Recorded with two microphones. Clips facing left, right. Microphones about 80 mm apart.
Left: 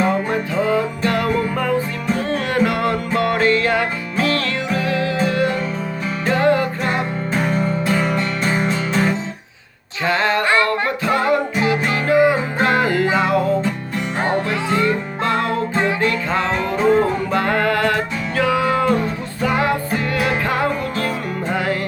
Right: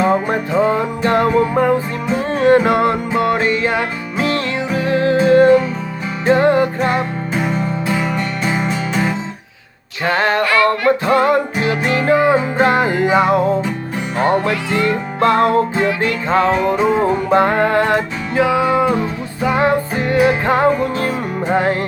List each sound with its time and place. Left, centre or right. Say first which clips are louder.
0.1 s music: right 4 dB; right
6.2 s music: right 4 dB; right
7.3 s music: even; centre
10.0 s a sound: right 2 dB; right
10.4 s singing: right 4 dB; left
10.7 s music: right 5 dB; right
14.5 s music: right 1 dB; left
14.8 s music: right 5 dB; right
16.5 s music: right 2 dB; centre
17.3 s music: right 5 dB; right
19.5 s music: right 5 dB; right